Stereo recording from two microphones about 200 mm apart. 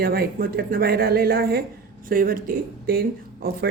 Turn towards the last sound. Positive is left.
turn(degrees=-45)  # may be behind; listen again after turning